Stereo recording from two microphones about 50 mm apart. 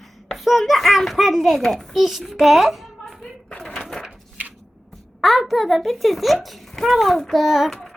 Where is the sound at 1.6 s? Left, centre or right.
Centre.